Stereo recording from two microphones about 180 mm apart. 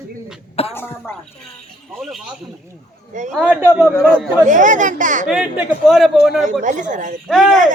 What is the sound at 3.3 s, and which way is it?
Speech, centre (ahead or behind).